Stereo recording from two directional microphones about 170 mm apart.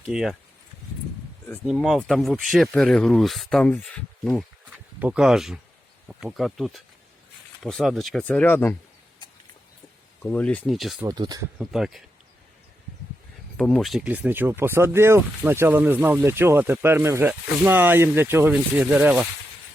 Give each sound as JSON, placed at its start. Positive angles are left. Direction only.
{"t": 0.1, "sound": "speech", "side_deg": 0}
{"t": 1.6, "sound": "speech", "side_deg": 0}
{"t": 10.2, "sound": "speech", "side_deg": 10}
{"t": 11.1, "sound": "speech", "side_deg": -25}
{"t": 11.6, "sound": "speech", "side_deg": -5}
{"t": 13.6, "sound": "speech", "side_deg": 5}